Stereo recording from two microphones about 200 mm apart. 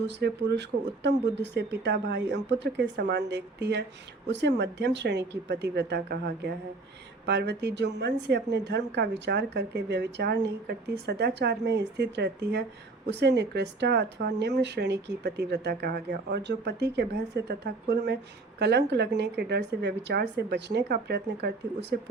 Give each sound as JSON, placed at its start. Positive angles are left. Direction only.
{"t": 0.1, "sound": "a woman's voice", "side_deg": -60}